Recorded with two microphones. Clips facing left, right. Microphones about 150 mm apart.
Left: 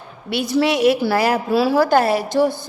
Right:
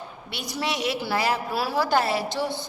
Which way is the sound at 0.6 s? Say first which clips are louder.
Left 10 dB; 55° left (ahead or behind).